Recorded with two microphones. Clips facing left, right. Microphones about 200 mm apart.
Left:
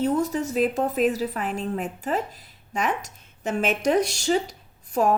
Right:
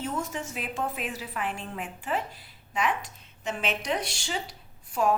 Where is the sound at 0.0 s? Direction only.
35° left (ahead or behind).